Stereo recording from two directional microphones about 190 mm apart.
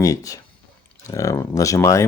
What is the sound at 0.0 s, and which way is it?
Speech, 15° left (ahead or behind).